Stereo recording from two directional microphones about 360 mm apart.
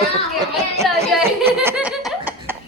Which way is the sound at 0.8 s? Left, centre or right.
Centre.